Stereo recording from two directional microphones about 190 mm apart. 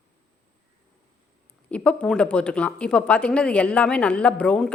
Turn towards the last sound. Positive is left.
turn(degrees=5)  # may be behind; listen again after turning